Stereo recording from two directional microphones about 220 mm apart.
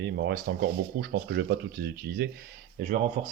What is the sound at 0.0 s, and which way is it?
Speech, 45° right (ahead or behind).